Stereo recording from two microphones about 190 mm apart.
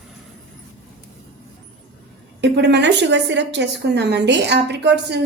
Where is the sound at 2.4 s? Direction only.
65° right (ahead or behind).